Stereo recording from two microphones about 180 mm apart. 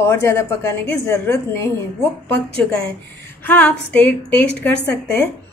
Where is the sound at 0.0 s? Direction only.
15° left (ahead or behind).